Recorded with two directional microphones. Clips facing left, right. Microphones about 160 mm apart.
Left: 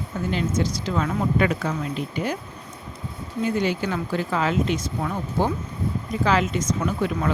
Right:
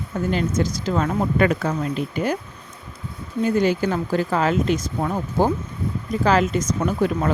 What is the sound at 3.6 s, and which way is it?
Speech, 45° right (ahead or behind).